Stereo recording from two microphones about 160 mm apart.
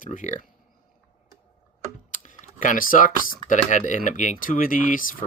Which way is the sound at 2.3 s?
55° left (ahead or behind).